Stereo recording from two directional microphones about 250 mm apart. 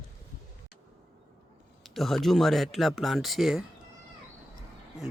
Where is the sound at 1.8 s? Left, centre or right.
Centre.